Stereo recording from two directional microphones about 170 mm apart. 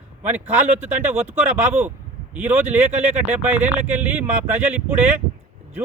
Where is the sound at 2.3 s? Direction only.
10° right (ahead or behind).